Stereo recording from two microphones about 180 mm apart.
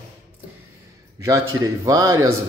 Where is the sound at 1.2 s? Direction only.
20° right (ahead or behind).